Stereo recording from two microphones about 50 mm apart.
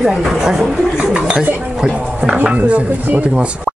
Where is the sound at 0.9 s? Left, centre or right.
Centre.